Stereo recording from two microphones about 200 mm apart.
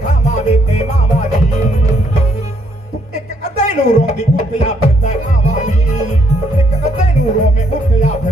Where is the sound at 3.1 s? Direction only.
35° left (ahead or behind).